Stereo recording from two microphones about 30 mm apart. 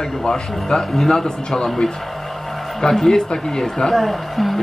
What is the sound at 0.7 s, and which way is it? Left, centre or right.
Speech, centre.